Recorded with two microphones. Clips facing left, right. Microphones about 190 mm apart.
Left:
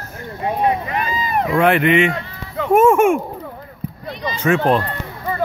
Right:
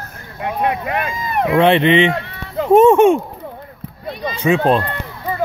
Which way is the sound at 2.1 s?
65° right (ahead or behind).